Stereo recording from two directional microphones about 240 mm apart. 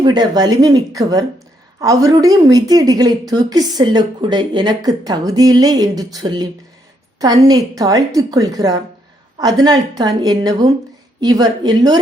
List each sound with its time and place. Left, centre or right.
0.0 s a woman's voice: centre